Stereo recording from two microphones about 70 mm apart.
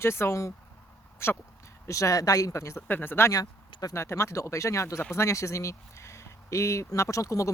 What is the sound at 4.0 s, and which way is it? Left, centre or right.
Speech, left.